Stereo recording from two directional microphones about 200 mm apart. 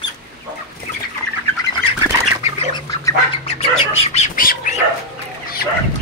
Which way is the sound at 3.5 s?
30° left (ahead or behind).